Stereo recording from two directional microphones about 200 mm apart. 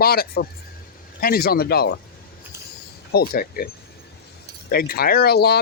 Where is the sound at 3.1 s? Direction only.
50° left (ahead or behind).